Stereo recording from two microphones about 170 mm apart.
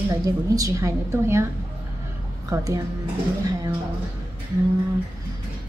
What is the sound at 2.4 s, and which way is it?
Speech, 20° right (ahead or behind).